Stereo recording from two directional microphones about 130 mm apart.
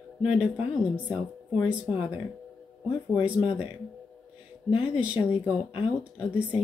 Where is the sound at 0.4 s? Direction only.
10° right (ahead or behind).